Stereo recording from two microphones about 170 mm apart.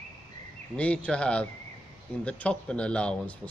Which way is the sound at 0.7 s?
5° left (ahead or behind).